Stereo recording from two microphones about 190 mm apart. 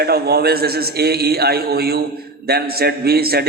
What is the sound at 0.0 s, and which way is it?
A man's voice, 55° right (ahead or behind).